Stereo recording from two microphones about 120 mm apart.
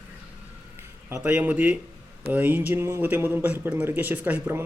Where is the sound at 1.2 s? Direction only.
15° right (ahead or behind).